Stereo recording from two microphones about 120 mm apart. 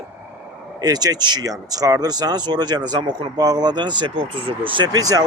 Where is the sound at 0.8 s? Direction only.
35° right (ahead or behind).